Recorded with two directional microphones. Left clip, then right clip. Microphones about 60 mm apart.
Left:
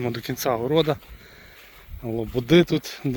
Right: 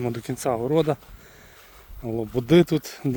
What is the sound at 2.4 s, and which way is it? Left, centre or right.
Speech, right.